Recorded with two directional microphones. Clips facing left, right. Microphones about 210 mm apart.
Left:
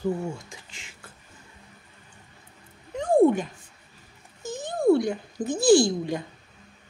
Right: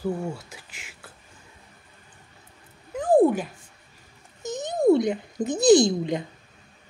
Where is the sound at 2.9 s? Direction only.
5° right (ahead or behind).